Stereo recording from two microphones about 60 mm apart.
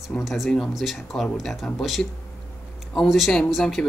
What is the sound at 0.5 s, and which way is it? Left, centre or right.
Speech, centre.